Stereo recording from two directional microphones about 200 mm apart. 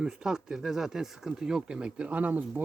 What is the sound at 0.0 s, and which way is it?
Speech, 5° right (ahead or behind).